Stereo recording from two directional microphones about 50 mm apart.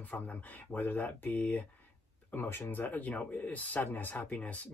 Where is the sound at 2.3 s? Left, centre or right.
Left.